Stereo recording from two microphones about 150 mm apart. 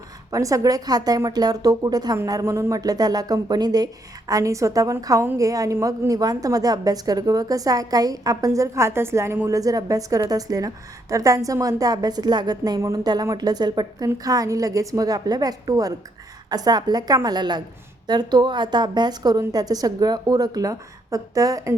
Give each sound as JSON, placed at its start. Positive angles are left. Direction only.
{"t": 0.3, "sound": "a woman's voice", "side_deg": -20}